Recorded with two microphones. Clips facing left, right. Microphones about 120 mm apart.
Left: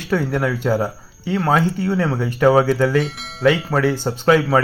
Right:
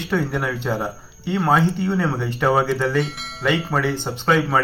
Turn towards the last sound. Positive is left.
turn(degrees=5)  # may be behind; listen again after turning